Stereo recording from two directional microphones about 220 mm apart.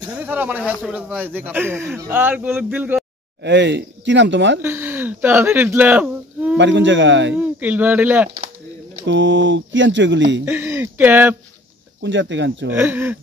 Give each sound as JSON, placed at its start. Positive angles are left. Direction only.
{"t": 0.1, "sound": "speech", "side_deg": -10}
{"t": 3.4, "sound": "speech", "side_deg": -50}
{"t": 4.6, "sound": "speech", "side_deg": -10}
{"t": 6.5, "sound": "speech", "side_deg": -55}
{"t": 7.3, "sound": "speech", "side_deg": -10}
{"t": 9.0, "sound": "speech", "side_deg": -55}
{"t": 10.4, "sound": "speech", "side_deg": -10}
{"t": 12.0, "sound": "speech", "side_deg": -55}
{"t": 12.7, "sound": "speech", "side_deg": -10}